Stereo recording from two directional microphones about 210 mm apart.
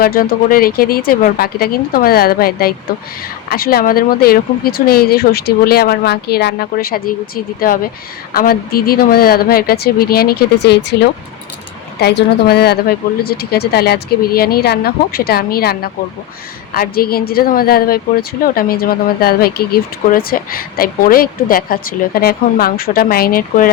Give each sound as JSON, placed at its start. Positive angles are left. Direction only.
{"t": 0.0, "sound": "a woman's voice", "side_deg": 45}